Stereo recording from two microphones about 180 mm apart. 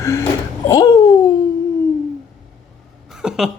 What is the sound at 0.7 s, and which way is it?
Babbling, 20° left (ahead or behind).